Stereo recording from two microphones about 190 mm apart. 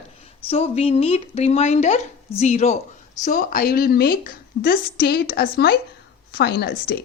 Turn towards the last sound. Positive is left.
turn(degrees=55)  # may be behind; listen again after turning